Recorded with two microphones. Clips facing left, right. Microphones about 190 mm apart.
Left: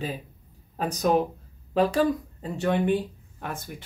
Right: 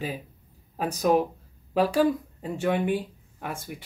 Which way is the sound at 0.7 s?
10° right (ahead or behind).